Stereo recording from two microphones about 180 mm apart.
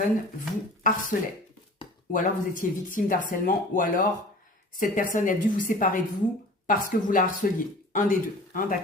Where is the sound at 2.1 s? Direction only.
50° left (ahead or behind).